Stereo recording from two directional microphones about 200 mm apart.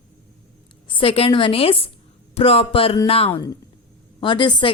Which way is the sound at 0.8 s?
25° left (ahead or behind).